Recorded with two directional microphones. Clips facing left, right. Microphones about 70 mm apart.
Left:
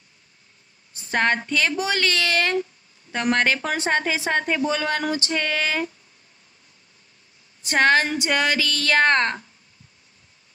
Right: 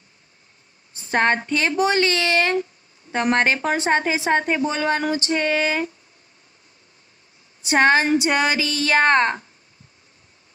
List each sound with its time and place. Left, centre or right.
1.1 s a woman's voice: right
7.6 s a woman's voice: right